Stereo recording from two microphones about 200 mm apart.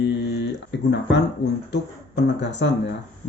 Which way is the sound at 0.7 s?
60° left (ahead or behind).